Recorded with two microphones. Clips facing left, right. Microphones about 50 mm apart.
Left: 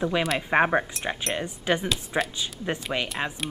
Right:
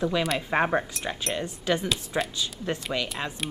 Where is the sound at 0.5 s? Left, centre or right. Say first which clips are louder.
Left 4 dB; left.